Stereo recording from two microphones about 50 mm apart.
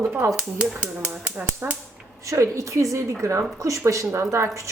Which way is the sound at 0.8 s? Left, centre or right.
Right.